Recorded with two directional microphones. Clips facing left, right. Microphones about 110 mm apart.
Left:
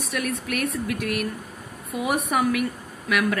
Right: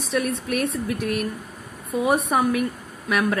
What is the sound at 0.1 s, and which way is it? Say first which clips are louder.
Speech: right 4 dB; 30° right (ahead or behind).